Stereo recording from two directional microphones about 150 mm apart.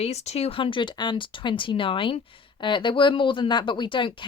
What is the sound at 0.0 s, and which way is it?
Speech, 45° left (ahead or behind).